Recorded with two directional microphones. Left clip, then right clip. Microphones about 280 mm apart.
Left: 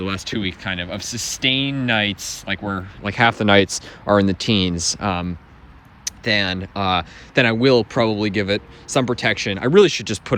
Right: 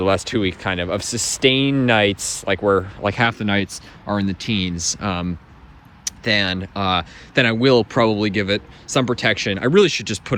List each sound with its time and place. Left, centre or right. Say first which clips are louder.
0.0 s speech: right 6 dB; centre
3.0 s speech: left 2 dB; centre
3.3 s speech: left 7 dB; centre